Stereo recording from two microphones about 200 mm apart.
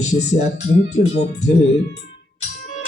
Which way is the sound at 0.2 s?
35° left (ahead or behind).